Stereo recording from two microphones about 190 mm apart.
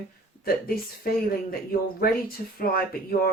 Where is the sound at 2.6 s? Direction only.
50° left (ahead or behind).